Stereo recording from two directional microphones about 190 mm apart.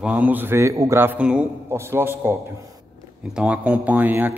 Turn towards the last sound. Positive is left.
turn(degrees=-10)  # may be behind; listen again after turning